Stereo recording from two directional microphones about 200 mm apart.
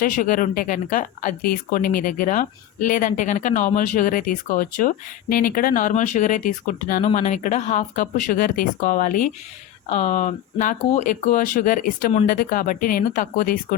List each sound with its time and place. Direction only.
0.0 s speech: 40° left (ahead or behind)